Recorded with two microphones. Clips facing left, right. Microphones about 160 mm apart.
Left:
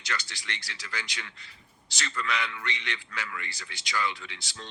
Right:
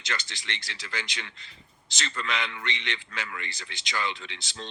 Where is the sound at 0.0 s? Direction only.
20° right (ahead or behind).